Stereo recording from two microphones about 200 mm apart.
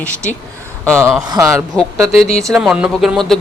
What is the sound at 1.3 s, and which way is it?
Speech, 15° right (ahead or behind).